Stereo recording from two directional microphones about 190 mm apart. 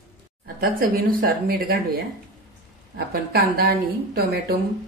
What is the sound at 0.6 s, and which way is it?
A woman's voice, 50° right (ahead or behind).